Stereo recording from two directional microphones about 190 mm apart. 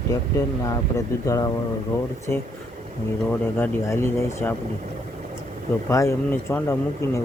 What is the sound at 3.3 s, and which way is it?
Speech, 10° left (ahead or behind).